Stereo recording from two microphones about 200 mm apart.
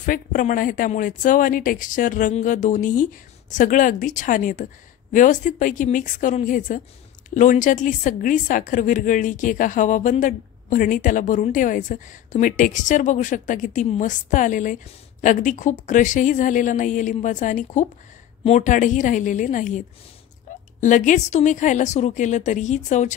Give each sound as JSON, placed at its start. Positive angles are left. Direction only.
{"t": 0.0, "sound": "a woman's voice", "side_deg": 40}
{"t": 20.8, "sound": "a woman's voice", "side_deg": 40}